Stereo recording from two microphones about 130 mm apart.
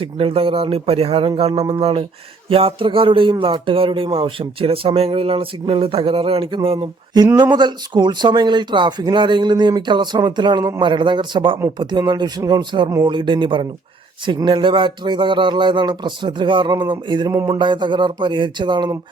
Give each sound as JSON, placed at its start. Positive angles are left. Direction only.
{"t": 0.0, "sound": "speech", "side_deg": -45}